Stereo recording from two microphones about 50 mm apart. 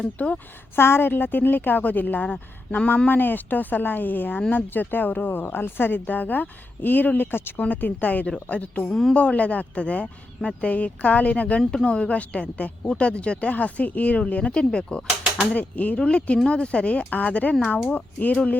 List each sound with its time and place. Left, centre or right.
0.0 s speech: left
0.8 s speech: left
3.1 s speech: left
7.6 s speech: left
8.9 s a woman's voice: centre
9.1 s speech: left
15.5 s speech: left
16.0 s speech: centre